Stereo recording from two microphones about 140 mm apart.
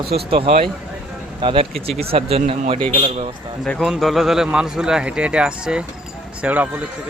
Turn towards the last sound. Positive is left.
turn(degrees=-10)  # may be behind; listen again after turning